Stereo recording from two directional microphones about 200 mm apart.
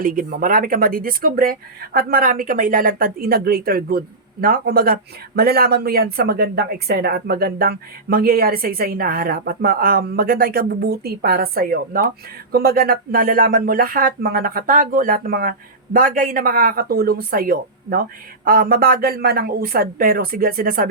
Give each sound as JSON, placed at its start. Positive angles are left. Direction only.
{"t": 0.0, "sound": "speech", "side_deg": -45}